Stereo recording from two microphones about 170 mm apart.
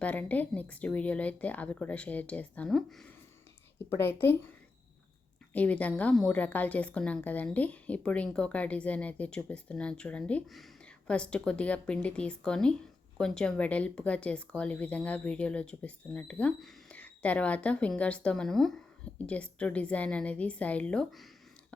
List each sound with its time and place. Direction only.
0.0 s a woman's voice: 10° left (ahead or behind)
3.8 s a woman's voice: 15° left (ahead or behind)
5.5 s a woman's voice: 10° left (ahead or behind)